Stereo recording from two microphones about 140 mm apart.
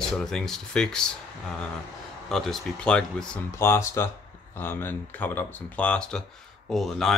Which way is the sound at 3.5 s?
20° left (ahead or behind).